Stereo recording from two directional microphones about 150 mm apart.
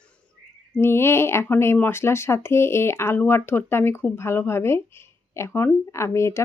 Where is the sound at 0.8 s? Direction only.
15° left (ahead or behind).